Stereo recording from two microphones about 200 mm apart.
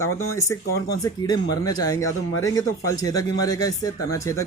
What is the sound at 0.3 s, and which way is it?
Speech, 15° left (ahead or behind).